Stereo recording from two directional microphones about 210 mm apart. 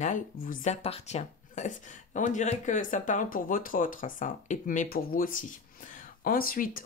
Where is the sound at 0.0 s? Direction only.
35° left (ahead or behind).